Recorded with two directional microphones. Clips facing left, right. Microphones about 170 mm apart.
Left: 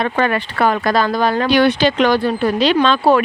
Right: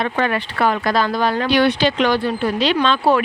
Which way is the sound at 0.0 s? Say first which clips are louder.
Left 3 dB; 50° left (ahead or behind).